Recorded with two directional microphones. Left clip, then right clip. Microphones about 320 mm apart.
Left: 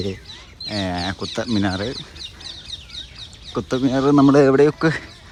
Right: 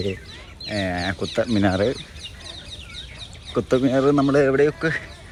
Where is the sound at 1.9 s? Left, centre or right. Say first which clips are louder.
Left 2 dB; centre.